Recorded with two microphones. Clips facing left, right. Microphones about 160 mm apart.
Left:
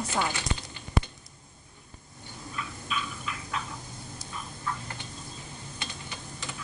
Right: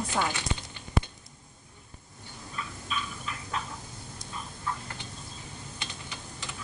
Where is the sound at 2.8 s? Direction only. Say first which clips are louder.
Left 1 dB; 35° right (ahead or behind).